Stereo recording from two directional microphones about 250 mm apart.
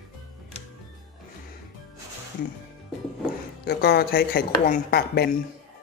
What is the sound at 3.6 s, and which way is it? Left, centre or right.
Speech, left.